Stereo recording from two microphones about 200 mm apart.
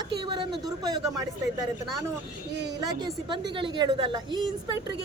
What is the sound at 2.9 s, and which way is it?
Speech, 20° right (ahead or behind).